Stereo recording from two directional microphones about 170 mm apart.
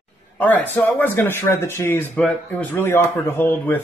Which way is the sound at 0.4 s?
10° left (ahead or behind).